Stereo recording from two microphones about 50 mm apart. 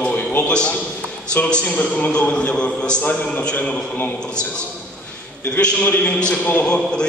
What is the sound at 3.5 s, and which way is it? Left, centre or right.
Speech, left.